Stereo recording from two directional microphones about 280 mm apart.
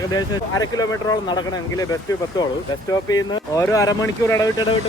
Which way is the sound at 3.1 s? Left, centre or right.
Centre.